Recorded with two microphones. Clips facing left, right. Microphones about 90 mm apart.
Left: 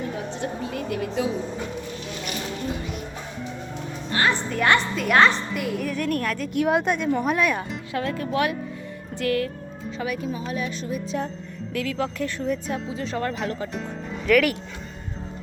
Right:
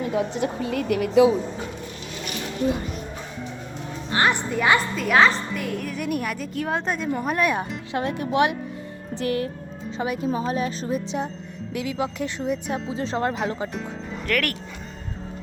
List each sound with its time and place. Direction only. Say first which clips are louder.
0.6 s a woman's voice: right 4 dB; 5° left (ahead or behind)
0.9 s speech: right 10 dB; 85° right
4.1 s a woman's voice: right 2 dB; 15° right (ahead or behind)
6.5 s a woman's voice: left 6 dB; 5° left (ahead or behind)
7.9 s speech: right 3 dB; 25° right (ahead or behind)
11.7 s speech: even; 15° right (ahead or behind)
12.9 s speech: right 4 dB; 30° right (ahead or behind)
13.7 s speech: even; centre (ahead or behind)